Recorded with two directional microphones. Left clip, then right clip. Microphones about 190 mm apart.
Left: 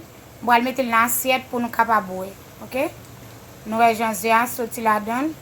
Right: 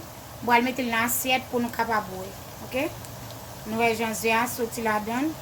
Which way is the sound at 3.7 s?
15° left (ahead or behind).